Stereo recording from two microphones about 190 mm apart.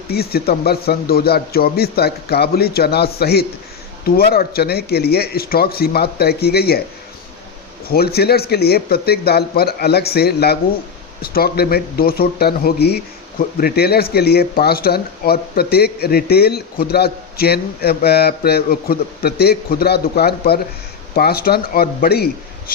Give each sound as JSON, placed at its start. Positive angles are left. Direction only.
{"t": 0.1, "sound": "speech", "side_deg": 55}
{"t": 7.9, "sound": "speech", "side_deg": 55}